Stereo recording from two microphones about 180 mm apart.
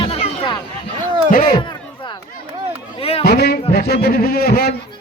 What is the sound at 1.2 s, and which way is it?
Speech, 55° left (ahead or behind).